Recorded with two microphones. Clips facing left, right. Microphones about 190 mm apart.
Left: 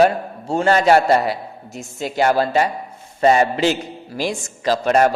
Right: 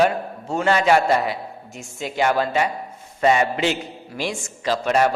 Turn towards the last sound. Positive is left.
turn(degrees=40)  # may be behind; listen again after turning